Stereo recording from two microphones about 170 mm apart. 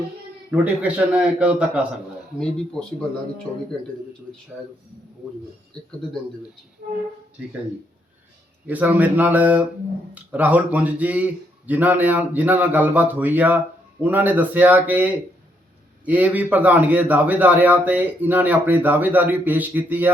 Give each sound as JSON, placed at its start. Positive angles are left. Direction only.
{"t": 0.5, "sound": "a man's voice", "side_deg": -10}
{"t": 2.4, "sound": "speech", "side_deg": 5}
{"t": 6.8, "sound": "a sound", "side_deg": -65}
{"t": 8.6, "sound": "a man's voice", "side_deg": -10}